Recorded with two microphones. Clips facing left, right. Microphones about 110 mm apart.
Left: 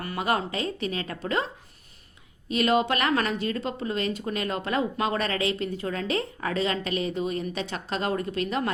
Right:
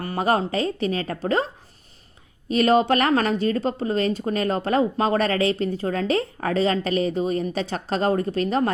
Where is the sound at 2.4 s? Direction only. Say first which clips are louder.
Right 5 dB; 40° right (ahead or behind).